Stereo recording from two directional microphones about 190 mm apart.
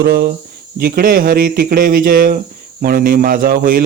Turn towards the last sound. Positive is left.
turn(degrees=-50)  # may be behind; listen again after turning